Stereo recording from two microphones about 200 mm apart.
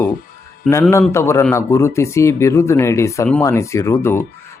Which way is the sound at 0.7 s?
15° left (ahead or behind).